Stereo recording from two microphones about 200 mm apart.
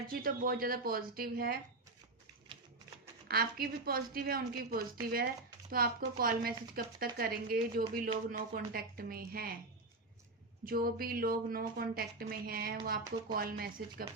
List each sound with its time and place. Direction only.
0.1 s speech: 45° right (ahead or behind)
3.2 s speech: 50° right (ahead or behind)
10.7 s speech: 45° right (ahead or behind)